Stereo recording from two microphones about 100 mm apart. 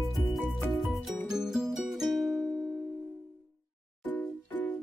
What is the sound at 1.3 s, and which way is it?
Music, 5° right (ahead or behind).